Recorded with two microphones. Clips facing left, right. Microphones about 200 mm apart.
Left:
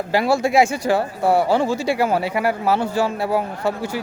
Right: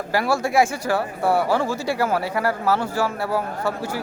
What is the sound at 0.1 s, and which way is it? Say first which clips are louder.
Speech: left 3 dB; 20° left (ahead or behind).